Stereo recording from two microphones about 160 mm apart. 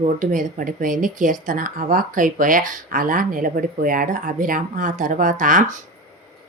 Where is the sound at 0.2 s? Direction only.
55° right (ahead or behind).